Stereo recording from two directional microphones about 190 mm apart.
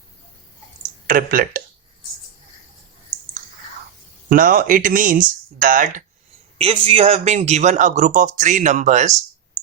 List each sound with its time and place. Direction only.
1.0 s speech: 45° right (ahead or behind)
4.3 s speech: 45° right (ahead or behind)
6.6 s speech: 30° right (ahead or behind)